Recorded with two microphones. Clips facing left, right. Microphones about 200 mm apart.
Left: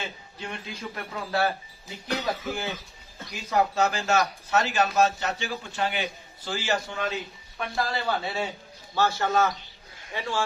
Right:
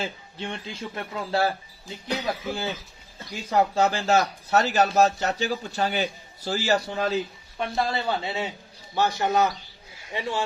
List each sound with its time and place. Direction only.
0.0 s a man's voice: 30° right (ahead or behind)
2.0 s speech: 15° right (ahead or behind)
3.5 s a man's voice: 30° right (ahead or behind)
7.6 s a man's voice: 20° right (ahead or behind)